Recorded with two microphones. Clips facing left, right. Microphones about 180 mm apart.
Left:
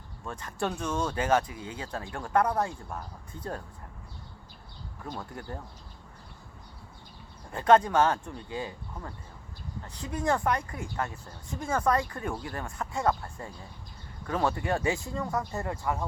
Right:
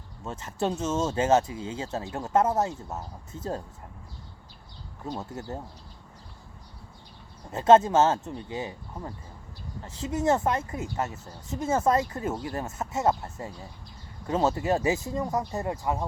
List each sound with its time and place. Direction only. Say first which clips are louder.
0.3 s a woman's voice: right 3 dB; 20° right (ahead or behind)
5.0 s a woman's voice: right 4 dB; 25° right (ahead or behind)
7.5 s a woman's voice: right 3 dB; 25° right (ahead or behind)